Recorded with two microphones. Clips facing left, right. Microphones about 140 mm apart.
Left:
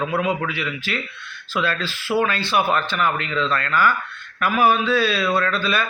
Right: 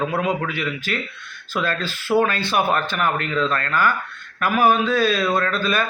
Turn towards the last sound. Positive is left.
turn(degrees=-45)  # may be behind; listen again after turning